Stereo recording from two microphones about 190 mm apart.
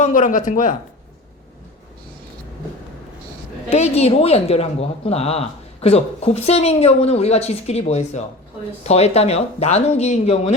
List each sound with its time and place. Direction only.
0.0 s speech: 40° left (ahead or behind)
3.7 s speech: 35° left (ahead or behind)